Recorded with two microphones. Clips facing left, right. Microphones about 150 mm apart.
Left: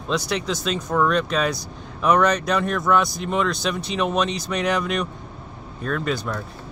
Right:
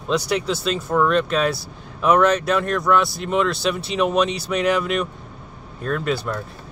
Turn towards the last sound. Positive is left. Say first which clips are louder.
# right 2 dB
turn(degrees=-5)  # may be behind; listen again after turning